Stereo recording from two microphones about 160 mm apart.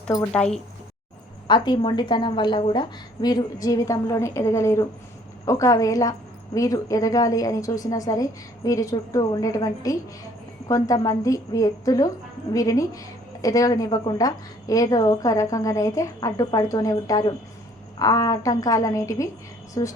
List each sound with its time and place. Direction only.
0.3 s speech: 5° left (ahead or behind)
1.5 s a woman's voice: 30° left (ahead or behind)